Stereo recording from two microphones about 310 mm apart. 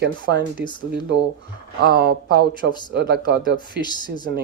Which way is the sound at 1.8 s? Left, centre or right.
Right.